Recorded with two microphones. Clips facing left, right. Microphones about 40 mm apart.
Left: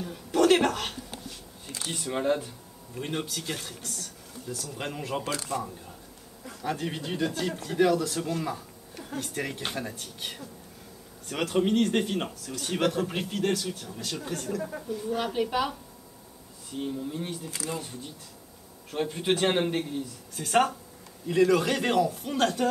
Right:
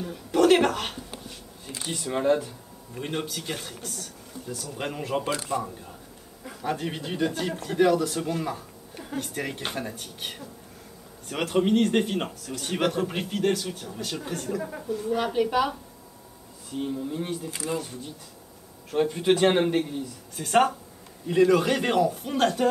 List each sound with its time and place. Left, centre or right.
0.0 s a sound: centre
1.9 s speech: centre
5.3 s speech: right
6.6 s a man's voice: centre
16.7 s a man's voice: centre